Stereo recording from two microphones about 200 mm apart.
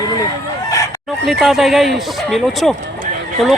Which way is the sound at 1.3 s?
Centre (ahead or behind).